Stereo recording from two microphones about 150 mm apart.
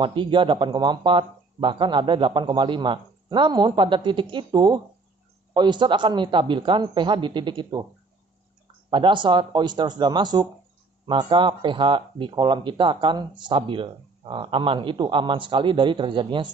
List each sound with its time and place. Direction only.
0.0 s speech: 35° right (ahead or behind)
8.9 s speech: 30° right (ahead or behind)